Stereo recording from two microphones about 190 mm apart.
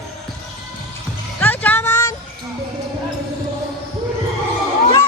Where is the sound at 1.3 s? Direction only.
10° left (ahead or behind).